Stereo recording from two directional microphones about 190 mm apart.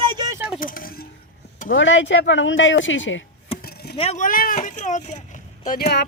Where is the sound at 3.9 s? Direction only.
35° left (ahead or behind).